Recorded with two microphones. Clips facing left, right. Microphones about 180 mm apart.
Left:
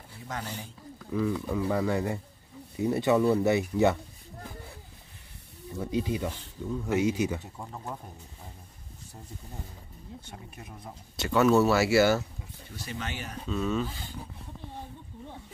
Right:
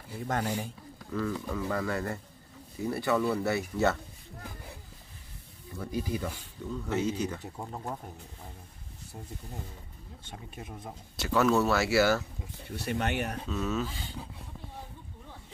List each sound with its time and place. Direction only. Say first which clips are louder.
1.1 s speech: left 4 dB; 15° left (ahead or behind)
5.8 s speech: left 3 dB; 20° left (ahead or behind)
6.7 s speech: left 4 dB; 10° left (ahead or behind)
7.5 s speech: right 2 dB; 20° right (ahead or behind)
10.2 s speech: right 1 dB; 25° right (ahead or behind)
11.1 s speech: left 3 dB; centre (ahead or behind)
12.7 s speech: right 7 dB; 65° right (ahead or behind)
13.5 s speech: left 5 dB; 5° right (ahead or behind)